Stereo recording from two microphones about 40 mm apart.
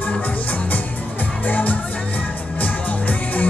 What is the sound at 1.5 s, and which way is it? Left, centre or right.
Music, left.